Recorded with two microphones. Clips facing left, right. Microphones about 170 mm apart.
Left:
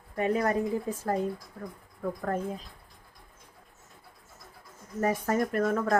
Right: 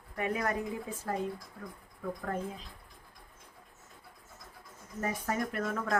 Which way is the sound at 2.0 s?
40° left (ahead or behind).